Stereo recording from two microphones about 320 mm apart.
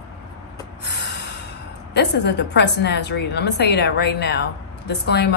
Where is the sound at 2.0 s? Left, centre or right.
Left.